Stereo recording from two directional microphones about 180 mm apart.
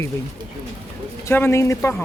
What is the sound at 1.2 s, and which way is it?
Speech, 15° left (ahead or behind).